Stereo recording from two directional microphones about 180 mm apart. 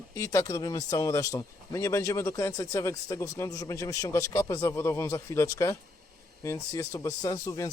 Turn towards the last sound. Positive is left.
turn(degrees=20)  # may be behind; listen again after turning